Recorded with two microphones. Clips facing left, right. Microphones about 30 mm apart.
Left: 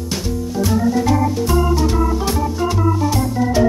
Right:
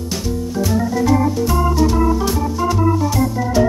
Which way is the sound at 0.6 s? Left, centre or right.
Centre.